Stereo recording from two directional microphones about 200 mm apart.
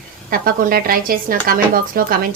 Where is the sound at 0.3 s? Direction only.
45° right (ahead or behind).